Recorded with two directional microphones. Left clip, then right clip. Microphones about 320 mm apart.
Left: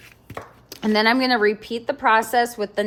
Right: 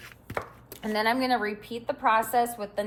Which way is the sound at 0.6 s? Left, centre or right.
Centre.